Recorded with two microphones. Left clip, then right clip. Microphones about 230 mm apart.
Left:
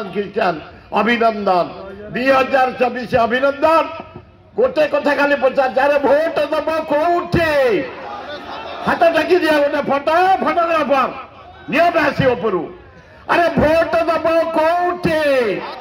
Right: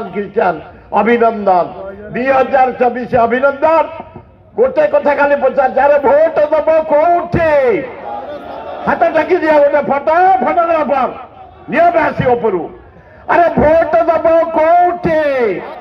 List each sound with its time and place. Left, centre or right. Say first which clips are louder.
0.1 s a man's voice: right 4 dB; left
8.8 s a man's voice: right 2 dB; left